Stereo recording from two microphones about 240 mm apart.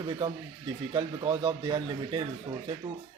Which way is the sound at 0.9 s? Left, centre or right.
Centre.